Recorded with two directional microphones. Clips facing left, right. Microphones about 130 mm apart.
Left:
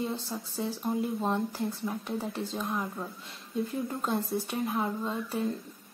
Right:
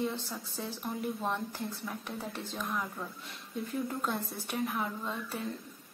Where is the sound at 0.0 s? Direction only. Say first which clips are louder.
Left 1 dB; 20° left (ahead or behind).